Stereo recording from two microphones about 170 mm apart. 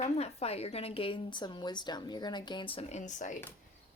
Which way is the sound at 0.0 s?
40° left (ahead or behind).